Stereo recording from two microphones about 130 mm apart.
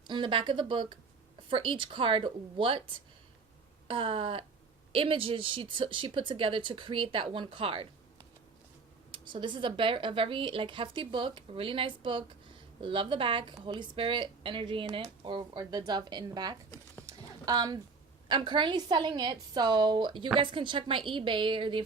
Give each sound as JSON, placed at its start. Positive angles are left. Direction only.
{"t": 0.1, "sound": "a woman's voice", "side_deg": -40}
{"t": 3.8, "sound": "a woman's voice", "side_deg": -45}
{"t": 9.1, "sound": "a woman's voice", "side_deg": -40}
{"t": 17.1, "sound": "clip-clop", "side_deg": -30}
{"t": 18.3, "sound": "a woman's voice", "side_deg": -35}